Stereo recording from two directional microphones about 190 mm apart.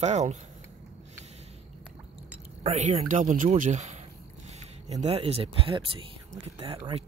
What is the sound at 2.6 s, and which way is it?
Speech, 35° right (ahead or behind).